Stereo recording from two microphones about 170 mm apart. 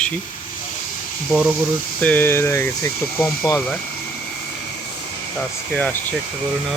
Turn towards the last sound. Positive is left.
turn(degrees=5)  # may be behind; listen again after turning